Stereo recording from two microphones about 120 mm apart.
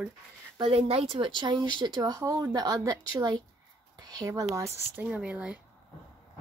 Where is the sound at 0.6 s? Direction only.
55° right (ahead or behind); by 4.7 s 25° right (ahead or behind).